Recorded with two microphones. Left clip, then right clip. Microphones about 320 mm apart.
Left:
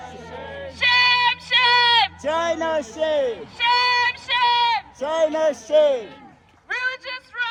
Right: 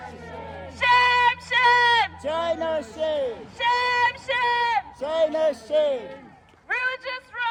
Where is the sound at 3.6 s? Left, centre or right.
Centre.